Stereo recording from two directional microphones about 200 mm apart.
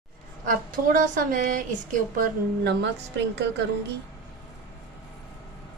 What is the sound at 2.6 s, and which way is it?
Speech, 55° right (ahead or behind).